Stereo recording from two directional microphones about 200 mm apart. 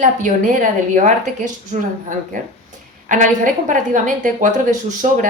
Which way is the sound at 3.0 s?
40° right (ahead or behind).